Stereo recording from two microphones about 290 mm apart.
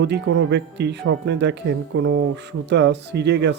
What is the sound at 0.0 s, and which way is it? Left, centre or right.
Speech, right.